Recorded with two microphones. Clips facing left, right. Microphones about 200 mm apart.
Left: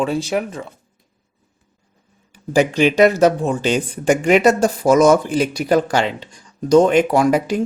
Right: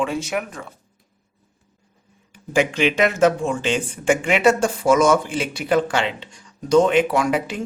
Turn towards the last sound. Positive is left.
turn(degrees=40)  # may be behind; listen again after turning